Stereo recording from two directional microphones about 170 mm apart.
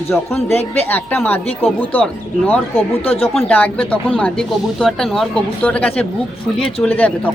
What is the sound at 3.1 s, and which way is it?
Speech, 35° left (ahead or behind).